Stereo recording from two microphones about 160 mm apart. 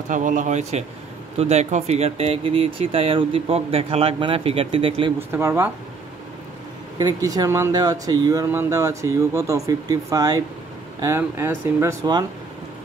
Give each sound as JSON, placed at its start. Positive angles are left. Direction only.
{"t": 0.1, "sound": "speech", "side_deg": -50}
{"t": 5.3, "sound": "speech", "side_deg": -15}
{"t": 7.0, "sound": "speech", "side_deg": -20}